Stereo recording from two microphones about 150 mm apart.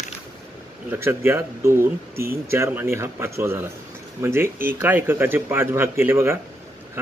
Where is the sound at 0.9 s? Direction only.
15° right (ahead or behind).